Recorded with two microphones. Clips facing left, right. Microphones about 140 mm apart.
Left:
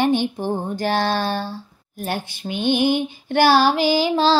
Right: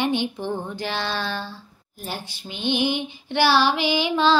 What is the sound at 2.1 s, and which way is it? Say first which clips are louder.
Female singing: left 7 dB; 55° left (ahead or behind).